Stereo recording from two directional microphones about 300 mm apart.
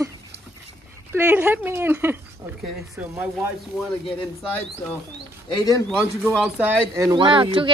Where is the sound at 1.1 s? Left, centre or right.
Centre.